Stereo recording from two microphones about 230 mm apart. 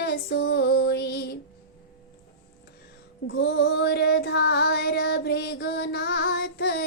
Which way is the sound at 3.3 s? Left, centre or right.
Left.